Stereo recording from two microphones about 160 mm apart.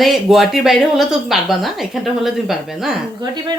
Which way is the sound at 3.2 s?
25° right (ahead or behind).